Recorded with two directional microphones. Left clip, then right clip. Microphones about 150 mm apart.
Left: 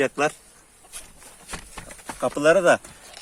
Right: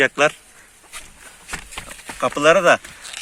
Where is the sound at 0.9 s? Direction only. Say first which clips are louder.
Right 6 dB; 25° right (ahead or behind).